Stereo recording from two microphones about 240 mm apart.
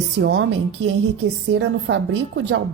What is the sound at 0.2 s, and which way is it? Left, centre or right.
Speech, right.